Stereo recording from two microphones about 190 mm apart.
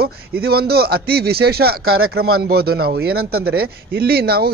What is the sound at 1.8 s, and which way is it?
Speech, 90° right.